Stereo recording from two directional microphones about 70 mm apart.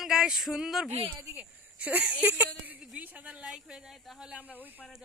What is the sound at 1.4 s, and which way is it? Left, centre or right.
Speech, right.